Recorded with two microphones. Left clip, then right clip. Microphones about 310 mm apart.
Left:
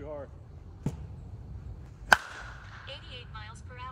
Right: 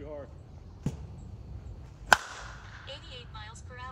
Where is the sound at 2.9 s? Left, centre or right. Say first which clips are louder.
Even; right.